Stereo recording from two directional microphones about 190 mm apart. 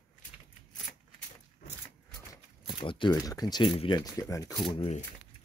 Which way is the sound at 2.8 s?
25° left (ahead or behind).